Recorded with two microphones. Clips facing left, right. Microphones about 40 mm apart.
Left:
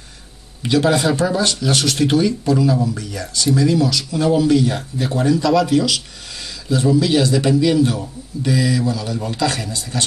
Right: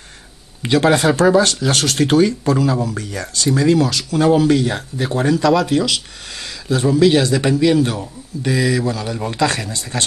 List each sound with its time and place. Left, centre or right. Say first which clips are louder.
0.6 s speech: right 2 dB; right
1.4 s speech: right 1 dB; right
2.6 s speech: left 1 dB; right